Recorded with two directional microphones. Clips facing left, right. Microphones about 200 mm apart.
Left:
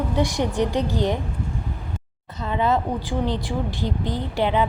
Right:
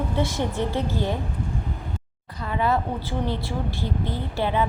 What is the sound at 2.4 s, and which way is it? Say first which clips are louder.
A woman's voice: left 2 dB; 20° left (ahead or behind).